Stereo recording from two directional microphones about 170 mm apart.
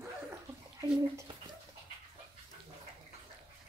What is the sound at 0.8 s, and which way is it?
Bathtub, 20° right (ahead or behind).